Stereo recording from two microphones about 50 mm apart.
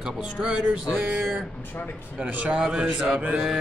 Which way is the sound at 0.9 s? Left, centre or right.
Right.